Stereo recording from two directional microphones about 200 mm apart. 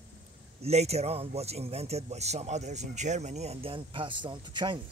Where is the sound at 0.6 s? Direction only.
30° right (ahead or behind).